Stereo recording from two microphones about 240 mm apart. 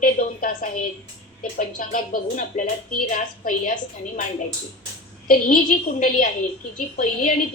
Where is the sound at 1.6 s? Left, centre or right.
Left.